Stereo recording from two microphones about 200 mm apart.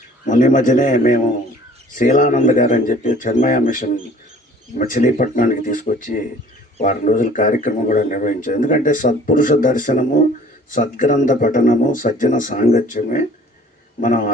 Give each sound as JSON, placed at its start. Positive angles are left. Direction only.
{"t": 0.3, "sound": "a man's voice", "side_deg": 40}